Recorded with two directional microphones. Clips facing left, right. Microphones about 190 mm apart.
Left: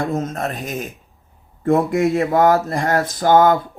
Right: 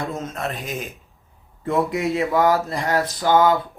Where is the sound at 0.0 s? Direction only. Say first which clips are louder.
Left 5 dB; 45° left (ahead or behind).